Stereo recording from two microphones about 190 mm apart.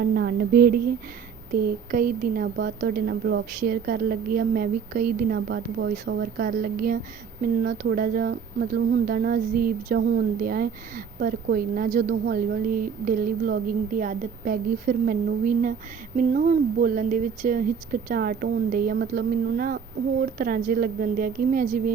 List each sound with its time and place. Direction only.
0.0 s speech: 60° right (ahead or behind)